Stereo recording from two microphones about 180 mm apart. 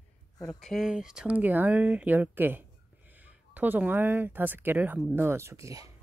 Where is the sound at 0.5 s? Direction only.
Centre (ahead or behind); by 5.9 s 20° right (ahead or behind).